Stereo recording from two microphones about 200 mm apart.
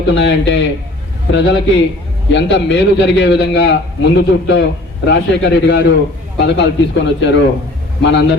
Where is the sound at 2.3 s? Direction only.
60° left (ahead or behind).